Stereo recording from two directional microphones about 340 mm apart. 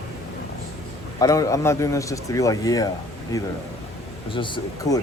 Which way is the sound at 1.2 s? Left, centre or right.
Centre.